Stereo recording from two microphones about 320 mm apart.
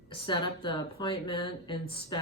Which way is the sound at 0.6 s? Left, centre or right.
Centre.